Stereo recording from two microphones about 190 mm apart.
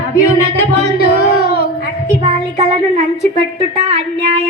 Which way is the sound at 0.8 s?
30° right (ahead or behind).